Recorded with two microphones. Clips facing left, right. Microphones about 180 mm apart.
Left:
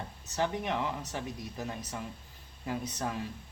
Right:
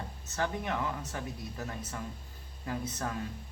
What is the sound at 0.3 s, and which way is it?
A man's voice, 20° left (ahead or behind).